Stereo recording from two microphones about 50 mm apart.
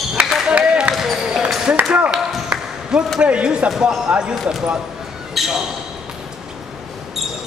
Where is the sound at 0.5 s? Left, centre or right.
Right.